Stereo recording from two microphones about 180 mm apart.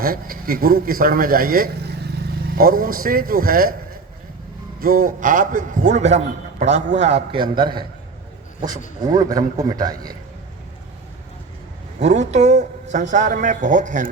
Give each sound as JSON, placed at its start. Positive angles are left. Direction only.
{"t": 0.0, "sound": "a man's voice", "side_deg": -55}
{"t": 4.8, "sound": "a man's voice", "side_deg": -50}
{"t": 7.5, "sound": "a man's voice", "side_deg": -25}
{"t": 9.0, "sound": "a man's voice", "side_deg": -20}
{"t": 11.9, "sound": "a man's voice", "side_deg": -40}